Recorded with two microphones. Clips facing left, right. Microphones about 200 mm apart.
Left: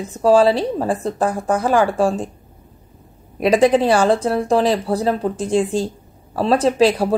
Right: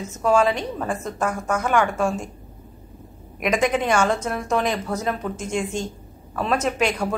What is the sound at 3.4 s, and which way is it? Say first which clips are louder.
Speech: left 7 dB; 35° left (ahead or behind).